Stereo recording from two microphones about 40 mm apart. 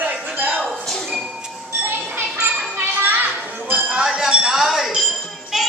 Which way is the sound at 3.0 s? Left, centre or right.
Right.